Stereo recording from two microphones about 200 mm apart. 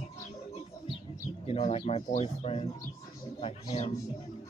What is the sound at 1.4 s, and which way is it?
Speech, 30° left (ahead or behind).